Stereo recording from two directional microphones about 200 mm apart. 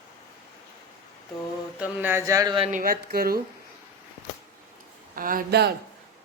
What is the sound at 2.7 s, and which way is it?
Speech, 45° right (ahead or behind).